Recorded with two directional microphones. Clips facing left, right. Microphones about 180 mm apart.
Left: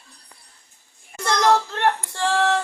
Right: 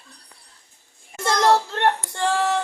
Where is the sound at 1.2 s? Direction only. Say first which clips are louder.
Even; 25° right (ahead or behind).